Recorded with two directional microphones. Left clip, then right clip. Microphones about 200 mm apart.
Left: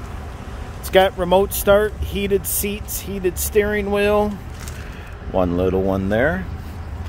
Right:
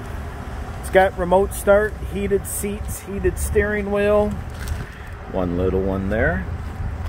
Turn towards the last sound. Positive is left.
turn(degrees=30)  # may be behind; listen again after turning